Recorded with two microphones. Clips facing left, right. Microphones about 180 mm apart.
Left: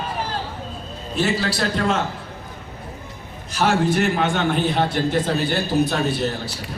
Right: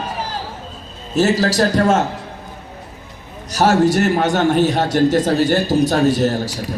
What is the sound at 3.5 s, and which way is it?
A man's voice, 40° right (ahead or behind).